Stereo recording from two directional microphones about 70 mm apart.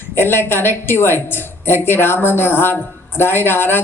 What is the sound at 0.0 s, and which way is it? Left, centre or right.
A woman's voice, left.